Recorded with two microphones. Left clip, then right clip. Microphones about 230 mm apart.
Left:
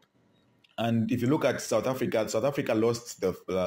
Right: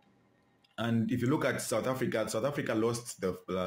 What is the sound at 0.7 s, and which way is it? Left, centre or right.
Speech, centre.